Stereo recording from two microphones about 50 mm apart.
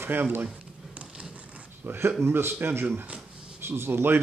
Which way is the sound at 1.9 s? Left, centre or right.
Right.